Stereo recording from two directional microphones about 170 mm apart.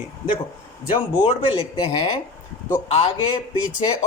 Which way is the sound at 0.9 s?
30° left (ahead or behind).